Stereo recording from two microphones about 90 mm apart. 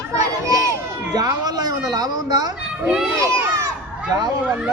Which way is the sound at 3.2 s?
30° right (ahead or behind).